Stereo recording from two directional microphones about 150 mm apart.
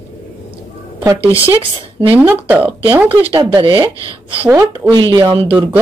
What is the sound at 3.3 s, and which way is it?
Speech, 35° right (ahead or behind).